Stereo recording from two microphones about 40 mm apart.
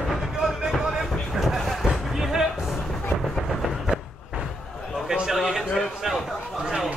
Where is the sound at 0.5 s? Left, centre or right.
Centre.